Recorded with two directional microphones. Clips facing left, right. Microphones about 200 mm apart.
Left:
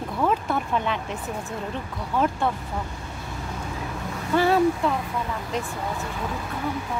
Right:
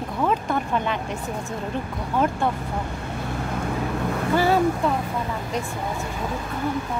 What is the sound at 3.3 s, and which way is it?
Vehicle, 60° right (ahead or behind).